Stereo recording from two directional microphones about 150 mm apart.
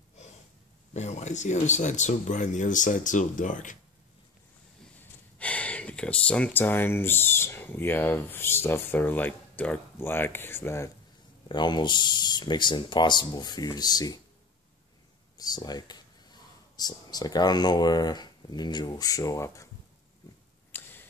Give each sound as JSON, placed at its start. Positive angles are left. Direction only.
{"t": 0.9, "sound": "speech", "side_deg": 50}
{"t": 5.4, "sound": "speech", "side_deg": 10}
{"t": 11.4, "sound": "speech", "side_deg": 30}
{"t": 15.3, "sound": "speech", "side_deg": 25}
{"t": 20.7, "sound": "a sound", "side_deg": 15}